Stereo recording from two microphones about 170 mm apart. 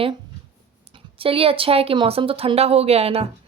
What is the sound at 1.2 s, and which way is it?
Speech, 35° right (ahead or behind).